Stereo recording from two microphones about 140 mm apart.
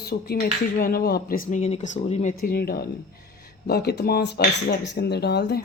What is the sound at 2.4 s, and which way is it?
Speech, 90° left.